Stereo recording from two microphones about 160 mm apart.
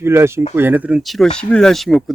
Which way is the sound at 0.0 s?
15° right (ahead or behind).